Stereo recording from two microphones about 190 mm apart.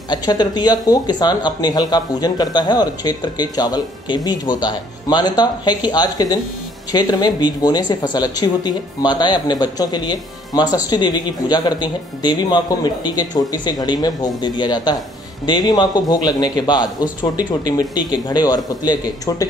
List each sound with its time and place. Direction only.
0.1 s speech: 20° left (ahead or behind)